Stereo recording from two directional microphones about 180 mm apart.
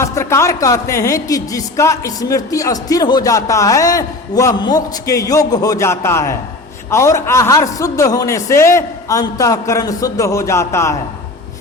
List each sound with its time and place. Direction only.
0.0 s a woman's voice: 15° left (ahead or behind)